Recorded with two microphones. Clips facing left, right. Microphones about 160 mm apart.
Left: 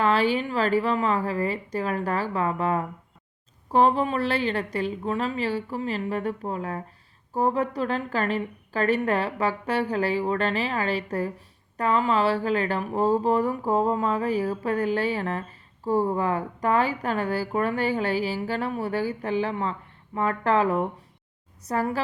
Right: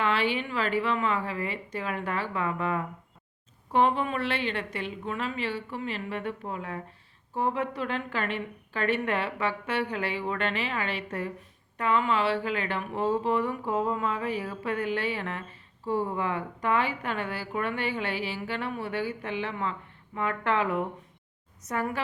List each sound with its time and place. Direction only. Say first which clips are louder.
0.0 s a woman's voice: left 5 dB; 40° left (ahead or behind)